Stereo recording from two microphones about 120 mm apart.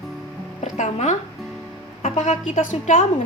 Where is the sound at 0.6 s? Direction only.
80° left.